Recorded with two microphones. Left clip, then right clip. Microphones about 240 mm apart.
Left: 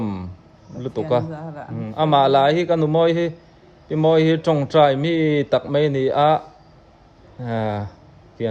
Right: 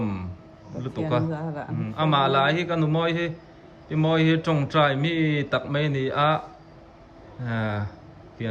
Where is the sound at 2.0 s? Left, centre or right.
Centre.